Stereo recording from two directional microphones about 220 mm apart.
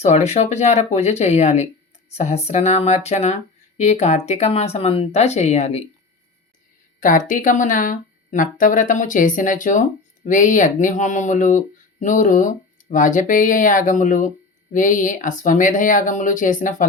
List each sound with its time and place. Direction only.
0.0 s speech: 30° left (ahead or behind)
7.0 s speech: 35° left (ahead or behind)